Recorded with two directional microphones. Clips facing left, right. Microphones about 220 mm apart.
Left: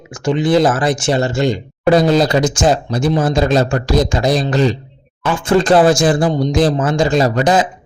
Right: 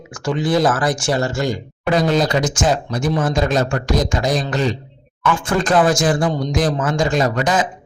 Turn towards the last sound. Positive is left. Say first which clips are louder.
# left 4 dB
turn(degrees=30)  # may be behind; listen again after turning